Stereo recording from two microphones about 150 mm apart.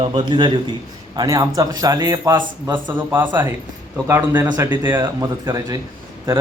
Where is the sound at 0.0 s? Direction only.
35° right (ahead or behind).